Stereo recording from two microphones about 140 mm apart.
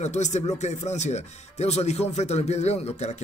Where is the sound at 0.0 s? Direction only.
55° left (ahead or behind).